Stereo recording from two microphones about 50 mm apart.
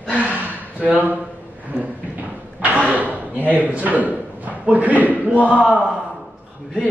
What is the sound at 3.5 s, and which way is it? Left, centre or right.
A man's voice, right.